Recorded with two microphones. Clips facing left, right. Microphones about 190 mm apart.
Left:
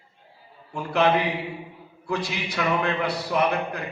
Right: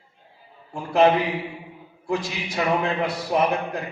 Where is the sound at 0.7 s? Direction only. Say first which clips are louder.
Right 4 dB; 65° left (ahead or behind).